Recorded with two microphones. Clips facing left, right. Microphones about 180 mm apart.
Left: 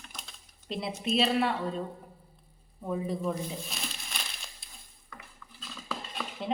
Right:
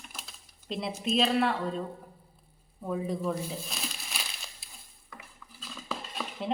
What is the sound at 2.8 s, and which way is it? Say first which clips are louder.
Crumpling: even; centre (ahead or behind).